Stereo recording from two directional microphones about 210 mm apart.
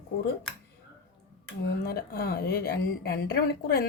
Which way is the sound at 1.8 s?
45° left (ahead or behind).